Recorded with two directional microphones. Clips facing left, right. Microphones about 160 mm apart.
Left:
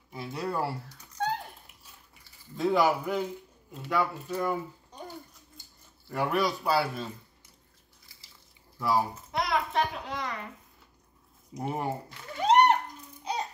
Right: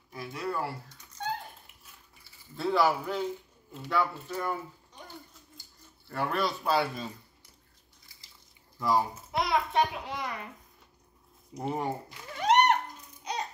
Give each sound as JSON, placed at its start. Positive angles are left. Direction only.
{"t": 0.1, "sound": "speech", "side_deg": 30}
{"t": 2.5, "sound": "a man's voice", "side_deg": 15}
{"t": 6.0, "sound": "a man's voice", "side_deg": 15}
{"t": 8.7, "sound": "a sound", "side_deg": 5}
{"t": 11.5, "sound": "speech", "side_deg": 5}
{"t": 12.4, "sound": "a sound", "side_deg": 30}